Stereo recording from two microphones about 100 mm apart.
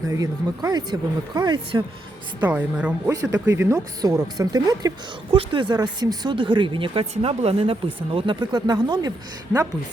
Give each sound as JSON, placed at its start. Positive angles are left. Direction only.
{"t": 0.1, "sound": "speech", "side_deg": -40}
{"t": 2.4, "sound": "speech", "side_deg": -15}
{"t": 3.1, "sound": "speech", "side_deg": -35}
{"t": 4.0, "sound": "speech", "side_deg": -40}
{"t": 5.3, "sound": "speech", "side_deg": -60}
{"t": 6.3, "sound": "speech", "side_deg": -55}
{"t": 8.4, "sound": "speech", "side_deg": -45}